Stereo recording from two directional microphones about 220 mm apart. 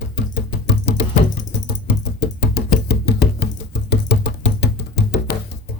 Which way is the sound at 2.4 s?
50° left (ahead or behind).